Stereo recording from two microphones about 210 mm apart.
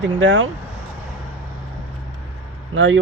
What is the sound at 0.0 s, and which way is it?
Speech, 60° right (ahead or behind).